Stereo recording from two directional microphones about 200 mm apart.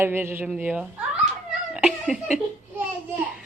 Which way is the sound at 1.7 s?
5° right (ahead or behind).